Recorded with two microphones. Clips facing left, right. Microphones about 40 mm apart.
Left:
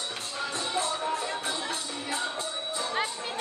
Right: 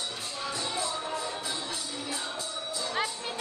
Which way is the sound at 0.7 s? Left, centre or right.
Left.